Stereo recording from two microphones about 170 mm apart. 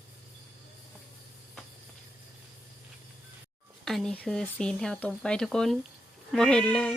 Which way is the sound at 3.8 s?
Centre (ahead or behind).